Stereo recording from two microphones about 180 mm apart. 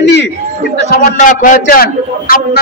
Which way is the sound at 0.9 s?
45° left (ahead or behind).